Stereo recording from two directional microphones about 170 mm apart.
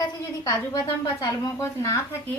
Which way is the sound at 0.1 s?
20° left (ahead or behind).